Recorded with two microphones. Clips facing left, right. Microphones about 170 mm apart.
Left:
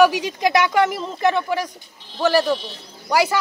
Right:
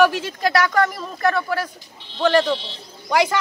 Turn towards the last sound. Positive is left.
turn(degrees=5)  # may be behind; listen again after turning